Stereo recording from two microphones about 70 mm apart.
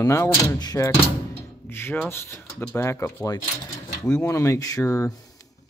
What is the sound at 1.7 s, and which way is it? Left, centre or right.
Speech, left.